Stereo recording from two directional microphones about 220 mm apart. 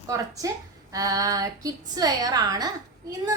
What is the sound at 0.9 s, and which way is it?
A woman's voice, 15° right (ahead or behind).